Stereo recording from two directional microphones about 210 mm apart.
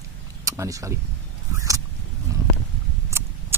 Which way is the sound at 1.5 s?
15° right (ahead or behind).